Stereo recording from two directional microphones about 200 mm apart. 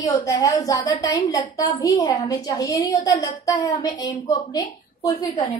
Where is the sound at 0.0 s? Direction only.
15° left (ahead or behind).